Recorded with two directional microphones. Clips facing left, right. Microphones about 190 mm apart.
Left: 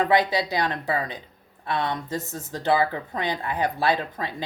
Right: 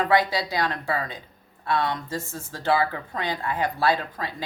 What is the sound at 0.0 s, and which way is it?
Speech, 20° left (ahead or behind).